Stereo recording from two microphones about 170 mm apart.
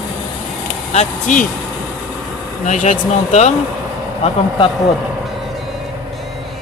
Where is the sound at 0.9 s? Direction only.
45° left (ahead or behind).